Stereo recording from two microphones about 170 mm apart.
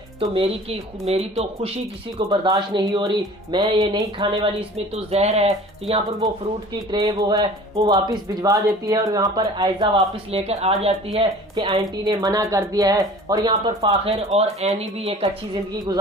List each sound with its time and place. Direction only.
0.2 s speech: 35° right (ahead or behind)
4.9 s speech: 40° right (ahead or behind)
6.9 s speech: 25° right (ahead or behind)
10.4 s speech: 40° right (ahead or behind)